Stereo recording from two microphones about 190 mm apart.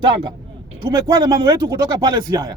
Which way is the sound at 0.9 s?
20° right (ahead or behind).